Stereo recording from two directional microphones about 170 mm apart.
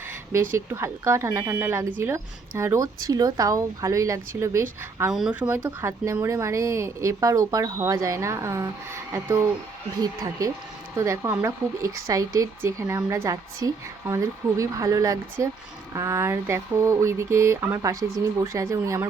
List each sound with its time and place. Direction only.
0.7 s speech: 15° right (ahead or behind)
5.1 s speech: 5° right (ahead or behind)